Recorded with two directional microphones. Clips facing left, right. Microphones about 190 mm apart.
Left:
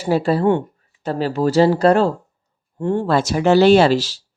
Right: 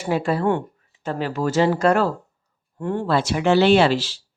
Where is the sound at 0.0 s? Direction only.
35° left (ahead or behind).